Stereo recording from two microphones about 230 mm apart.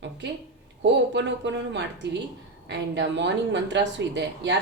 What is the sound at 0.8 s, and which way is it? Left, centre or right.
Speech, right.